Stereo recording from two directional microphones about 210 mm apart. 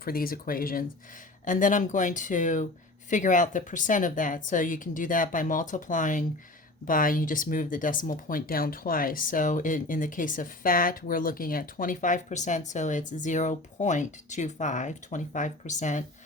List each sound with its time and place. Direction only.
0.0 s speech: 45° left (ahead or behind)